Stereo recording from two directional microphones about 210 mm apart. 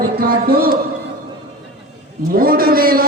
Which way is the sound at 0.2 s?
45° right (ahead or behind).